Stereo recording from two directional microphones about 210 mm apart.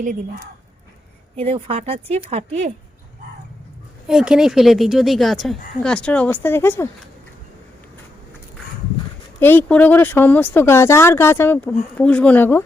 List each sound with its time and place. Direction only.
1.4 s speech: 30° right (ahead or behind)
4.0 s a woman's voice: centre (ahead or behind)
9.4 s speech: 10° left (ahead or behind)